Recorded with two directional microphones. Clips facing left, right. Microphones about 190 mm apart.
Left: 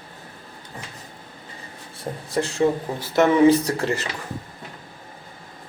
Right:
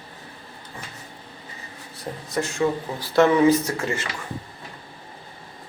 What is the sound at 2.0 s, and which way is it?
Speech, 30° left (ahead or behind).